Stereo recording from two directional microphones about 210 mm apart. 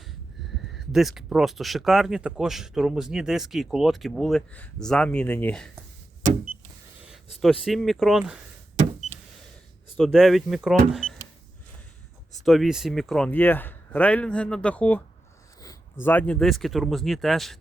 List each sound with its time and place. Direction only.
0.7 s speech: centre (ahead or behind)
7.4 s speech: centre (ahead or behind)
8.7 s power windows: 35° right (ahead or behind)
10.0 s speech: centre (ahead or behind)
12.5 s speech: centre (ahead or behind)